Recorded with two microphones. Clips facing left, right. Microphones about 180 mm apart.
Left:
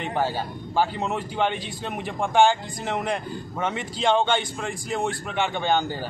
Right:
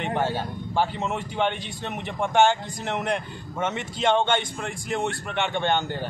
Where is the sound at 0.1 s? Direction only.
5° left (ahead or behind).